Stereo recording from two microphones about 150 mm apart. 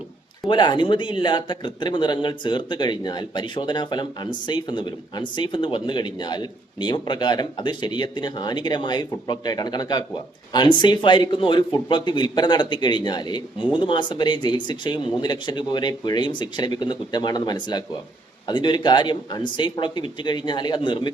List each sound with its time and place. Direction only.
0.4 s a man's voice: 30° left (ahead or behind)